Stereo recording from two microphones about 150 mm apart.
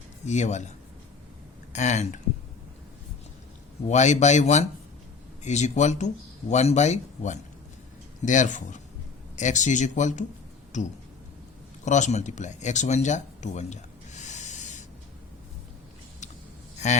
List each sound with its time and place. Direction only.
0.3 s speech: 50° left (ahead or behind)
1.7 s speech: 50° left (ahead or behind)
3.8 s speech: 50° left (ahead or behind)
16.7 s a sound: 50° left (ahead or behind)